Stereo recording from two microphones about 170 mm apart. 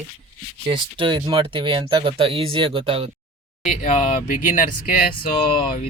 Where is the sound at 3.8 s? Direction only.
50° left (ahead or behind).